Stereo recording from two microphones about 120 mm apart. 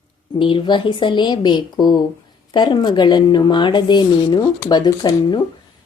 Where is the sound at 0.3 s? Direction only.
45° left (ahead or behind).